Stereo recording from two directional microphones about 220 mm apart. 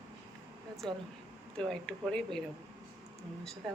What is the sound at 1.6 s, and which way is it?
Speech, 5° left (ahead or behind).